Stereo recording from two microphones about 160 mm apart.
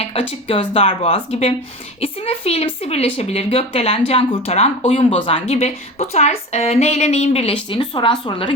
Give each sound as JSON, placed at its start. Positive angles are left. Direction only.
{"t": 0.0, "sound": "speech", "side_deg": 35}